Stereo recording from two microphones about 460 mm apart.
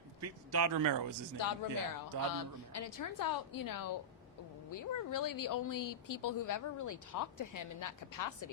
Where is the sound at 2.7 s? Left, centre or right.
Left.